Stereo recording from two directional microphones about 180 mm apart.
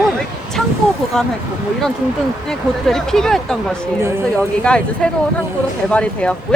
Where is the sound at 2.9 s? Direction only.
5° left (ahead or behind).